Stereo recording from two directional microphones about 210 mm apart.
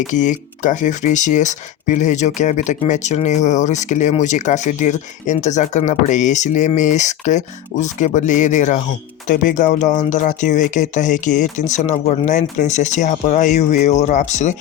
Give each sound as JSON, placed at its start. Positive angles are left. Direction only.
{"t": 0.1, "sound": "speech", "side_deg": 35}